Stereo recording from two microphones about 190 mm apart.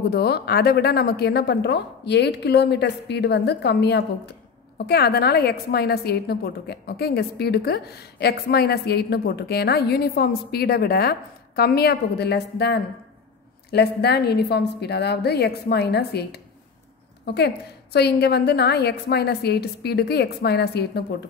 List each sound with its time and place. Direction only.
0.1 s a woman's voice: 60° left (ahead or behind)